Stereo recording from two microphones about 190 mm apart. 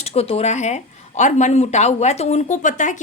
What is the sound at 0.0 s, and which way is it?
A woman's voice, 30° left (ahead or behind).